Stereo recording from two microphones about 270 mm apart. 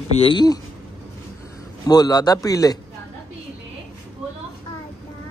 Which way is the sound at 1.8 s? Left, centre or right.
Centre.